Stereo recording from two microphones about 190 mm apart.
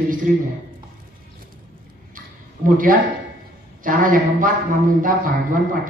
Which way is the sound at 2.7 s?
45° right (ahead or behind).